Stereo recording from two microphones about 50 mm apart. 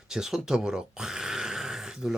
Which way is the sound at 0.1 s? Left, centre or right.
Centre.